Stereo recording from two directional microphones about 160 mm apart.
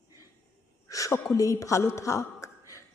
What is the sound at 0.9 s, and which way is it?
A woman's voice, 20° left (ahead or behind).